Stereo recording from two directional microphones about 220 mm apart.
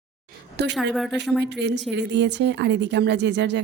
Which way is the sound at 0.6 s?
50° right (ahead or behind).